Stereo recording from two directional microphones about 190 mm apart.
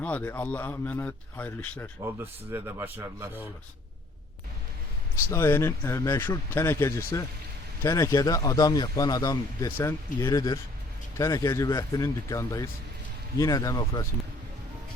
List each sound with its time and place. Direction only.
0.0 s speech: 10° left (ahead or behind)
2.1 s speech: 15° right (ahead or behind)
5.3 s speech: 10° left (ahead or behind)